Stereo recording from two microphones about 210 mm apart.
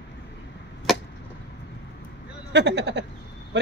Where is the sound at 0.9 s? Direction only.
Centre (ahead or behind).